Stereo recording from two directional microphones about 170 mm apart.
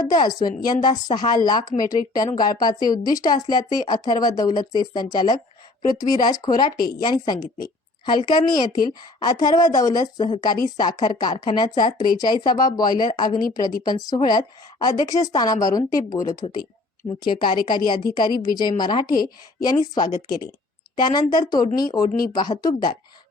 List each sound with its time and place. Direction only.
0.1 s a woman's voice: 25° left (ahead or behind)
21.1 s a woman's voice: 25° left (ahead or behind)